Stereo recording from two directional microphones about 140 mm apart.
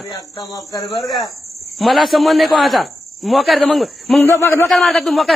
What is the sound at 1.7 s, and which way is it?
A man's voice, centre (ahead or behind).